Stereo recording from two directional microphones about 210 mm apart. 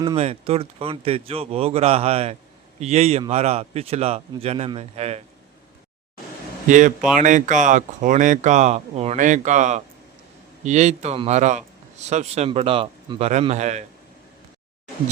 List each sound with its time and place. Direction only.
0.2 s a man's voice: 30° right (ahead or behind)
6.7 s a man's voice: 35° right (ahead or behind)